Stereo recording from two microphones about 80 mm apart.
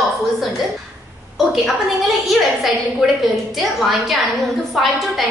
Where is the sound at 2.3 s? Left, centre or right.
Centre.